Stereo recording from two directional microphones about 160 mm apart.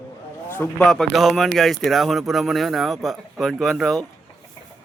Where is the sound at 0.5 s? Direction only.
5° left (ahead or behind).